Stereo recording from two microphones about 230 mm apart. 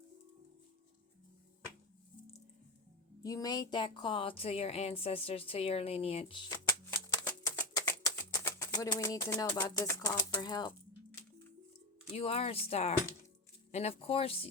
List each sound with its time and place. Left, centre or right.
3.2 s speech: centre
12.1 s speech: left